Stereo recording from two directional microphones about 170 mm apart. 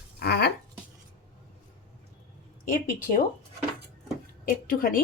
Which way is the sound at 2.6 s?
55° left (ahead or behind).